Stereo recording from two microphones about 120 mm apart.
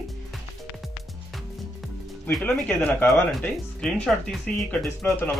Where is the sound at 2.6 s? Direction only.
15° left (ahead or behind).